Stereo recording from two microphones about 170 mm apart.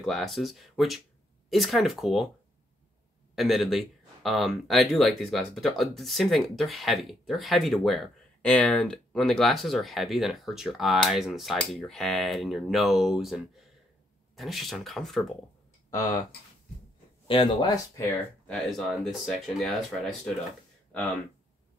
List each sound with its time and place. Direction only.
0.0 s speech: centre (ahead or behind)
3.3 s speech: centre (ahead or behind)
15.9 s speech: 20° left (ahead or behind)
17.3 s speech: 30° left (ahead or behind)
18.5 s speech: centre (ahead or behind)